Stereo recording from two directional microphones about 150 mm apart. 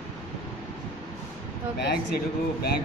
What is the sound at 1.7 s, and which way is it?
Speech, 90° left.